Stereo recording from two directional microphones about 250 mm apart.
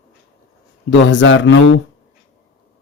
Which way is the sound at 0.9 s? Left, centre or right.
Left.